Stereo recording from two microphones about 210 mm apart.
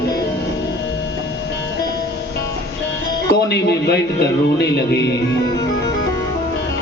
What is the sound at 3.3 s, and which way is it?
Speech, 50° left (ahead or behind).